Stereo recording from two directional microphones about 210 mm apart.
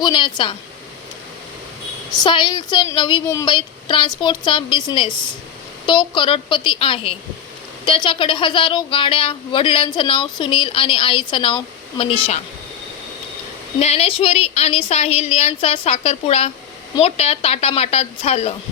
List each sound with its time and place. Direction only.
0.0 s a woman's voice: 20° left (ahead or behind)
2.1 s a woman's voice: 20° left (ahead or behind)
13.7 s a woman's voice: 30° left (ahead or behind)